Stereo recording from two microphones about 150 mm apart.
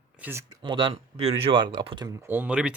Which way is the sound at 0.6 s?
30° right (ahead or behind).